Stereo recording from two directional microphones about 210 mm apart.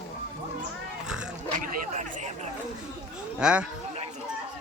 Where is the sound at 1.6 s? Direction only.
40° right (ahead or behind).